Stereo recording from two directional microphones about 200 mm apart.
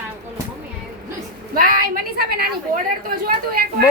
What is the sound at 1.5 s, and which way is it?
A woman's voice, 45° right (ahead or behind).